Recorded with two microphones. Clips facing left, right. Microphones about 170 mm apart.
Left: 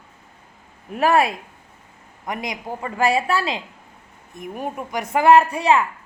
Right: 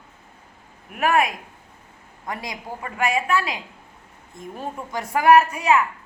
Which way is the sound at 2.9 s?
30° left (ahead or behind).